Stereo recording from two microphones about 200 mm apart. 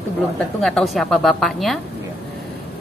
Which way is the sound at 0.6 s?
Centre (ahead or behind).